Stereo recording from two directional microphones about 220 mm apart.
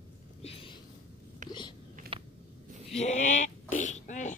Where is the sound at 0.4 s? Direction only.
25° left (ahead or behind).